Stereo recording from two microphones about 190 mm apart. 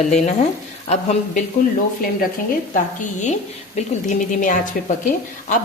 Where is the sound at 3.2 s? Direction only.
35° left (ahead or behind).